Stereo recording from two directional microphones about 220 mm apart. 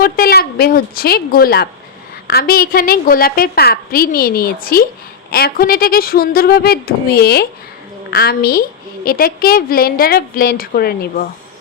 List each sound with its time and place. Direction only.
0.0 s a woman's voice: 45° left (ahead or behind)